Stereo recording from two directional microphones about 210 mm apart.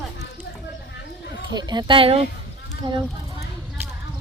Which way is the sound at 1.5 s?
20° right (ahead or behind).